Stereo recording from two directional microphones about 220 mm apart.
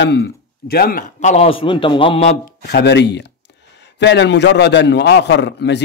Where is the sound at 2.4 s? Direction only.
45° left (ahead or behind).